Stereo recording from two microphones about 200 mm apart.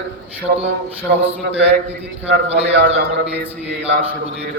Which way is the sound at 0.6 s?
60° right (ahead or behind).